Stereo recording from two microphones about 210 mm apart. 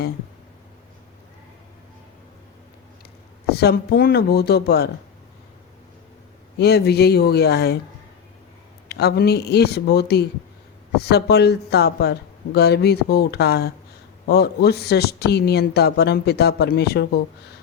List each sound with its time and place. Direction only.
3.5 s speech: 50° left (ahead or behind)
6.6 s speech: 50° left (ahead or behind)
8.9 s speech: 50° left (ahead or behind)